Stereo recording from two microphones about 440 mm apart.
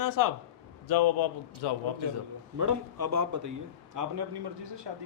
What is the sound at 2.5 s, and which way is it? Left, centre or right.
A man's voice, right.